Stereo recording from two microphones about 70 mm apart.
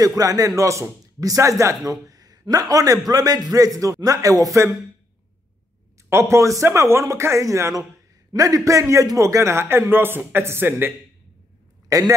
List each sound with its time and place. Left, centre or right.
0.0 s speech: right
0.6 s a man's voice: right
1.9 s a sound: right
2.7 s speech: right
6.0 s a man's voice: right
11.9 s speech: right